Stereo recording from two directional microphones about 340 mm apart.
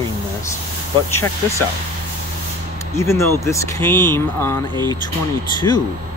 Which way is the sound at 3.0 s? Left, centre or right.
Centre.